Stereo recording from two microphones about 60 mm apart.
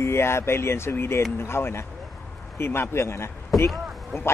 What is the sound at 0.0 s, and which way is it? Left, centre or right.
Speech, left.